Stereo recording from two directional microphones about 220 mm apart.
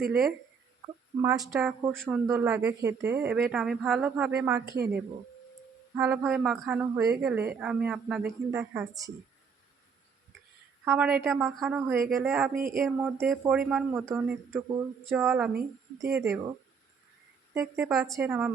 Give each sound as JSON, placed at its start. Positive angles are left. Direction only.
{"t": 0.8, "sound": "a woman's voice", "side_deg": -15}
{"t": 6.0, "sound": "a woman's voice", "side_deg": -5}
{"t": 10.8, "sound": "a woman's voice", "side_deg": -5}
{"t": 12.5, "sound": "a sound", "side_deg": -40}
{"t": 12.8, "sound": "a woman's voice", "side_deg": -5}
{"t": 17.5, "sound": "a woman's voice", "side_deg": -10}